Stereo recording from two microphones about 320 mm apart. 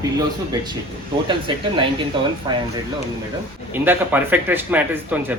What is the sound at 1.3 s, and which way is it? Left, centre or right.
Speech, centre.